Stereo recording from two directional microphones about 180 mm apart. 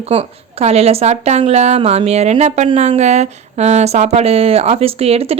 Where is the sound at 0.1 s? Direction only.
35° right (ahead or behind).